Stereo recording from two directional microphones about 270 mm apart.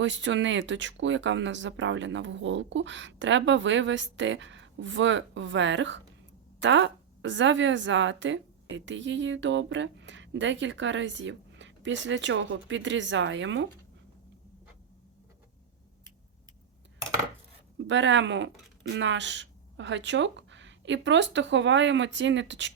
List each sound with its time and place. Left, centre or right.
0.0 s a woman's voice: right
17.7 s speech: right